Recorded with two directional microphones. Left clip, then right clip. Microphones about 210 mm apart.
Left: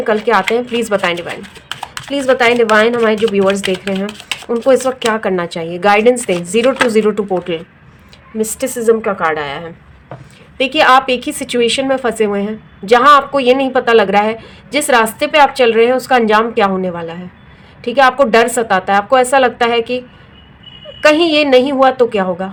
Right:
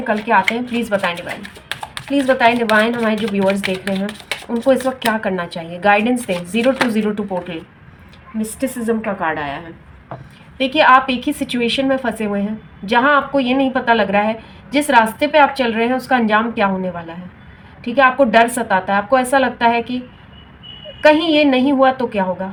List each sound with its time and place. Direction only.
0.0 s a woman's voice: 45° left (ahead or behind)
2.1 s speech: 35° left (ahead or behind)
8.4 s a woman's voice: 50° left (ahead or behind)
10.6 s a woman's voice: 45° left (ahead or behind)
21.1 s a woman's voice: 45° left (ahead or behind)